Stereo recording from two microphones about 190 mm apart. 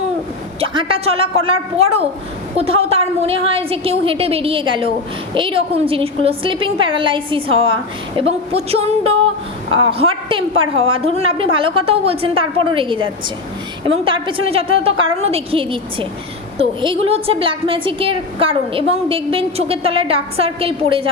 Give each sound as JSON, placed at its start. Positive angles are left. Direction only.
{"t": 0.6, "sound": "a woman's voice", "side_deg": -30}